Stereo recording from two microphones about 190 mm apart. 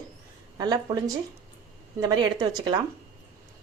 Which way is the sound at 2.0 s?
20° right (ahead or behind).